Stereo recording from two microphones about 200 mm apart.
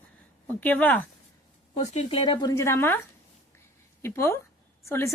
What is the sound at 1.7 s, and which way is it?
A woman's voice, 35° left (ahead or behind).